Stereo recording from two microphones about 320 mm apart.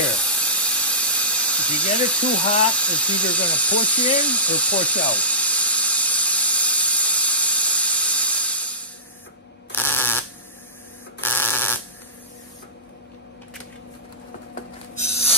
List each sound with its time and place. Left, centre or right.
0.0 s steam: centre
9.7 s electric toothbrush: centre